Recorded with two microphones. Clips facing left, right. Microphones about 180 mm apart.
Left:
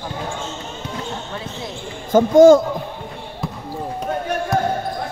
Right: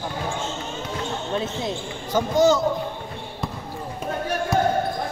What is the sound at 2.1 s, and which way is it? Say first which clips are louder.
Speech: left 9 dB; 50° left (ahead or behind).